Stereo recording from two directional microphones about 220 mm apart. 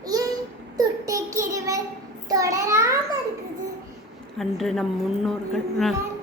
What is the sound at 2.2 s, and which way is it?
Speech, 15° right (ahead or behind).